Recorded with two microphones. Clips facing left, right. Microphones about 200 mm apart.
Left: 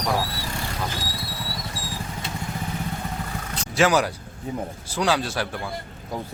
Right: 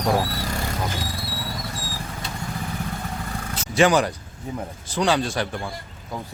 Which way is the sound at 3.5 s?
Centre (ahead or behind).